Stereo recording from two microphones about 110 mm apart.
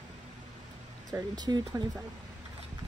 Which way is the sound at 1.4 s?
35° right (ahead or behind).